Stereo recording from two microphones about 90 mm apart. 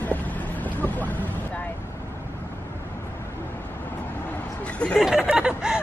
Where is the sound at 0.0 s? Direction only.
20° left (ahead or behind).